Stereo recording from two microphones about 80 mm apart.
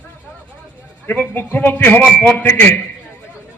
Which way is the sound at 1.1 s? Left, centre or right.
Left.